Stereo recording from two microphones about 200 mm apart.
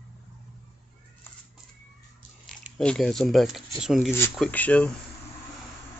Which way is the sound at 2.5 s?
5° left (ahead or behind).